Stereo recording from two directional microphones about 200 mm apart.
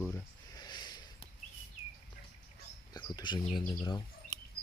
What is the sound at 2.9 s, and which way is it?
Speech, 20° left (ahead or behind).